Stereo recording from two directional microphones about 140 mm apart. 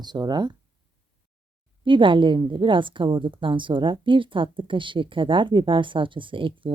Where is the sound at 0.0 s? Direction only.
30° right (ahead or behind).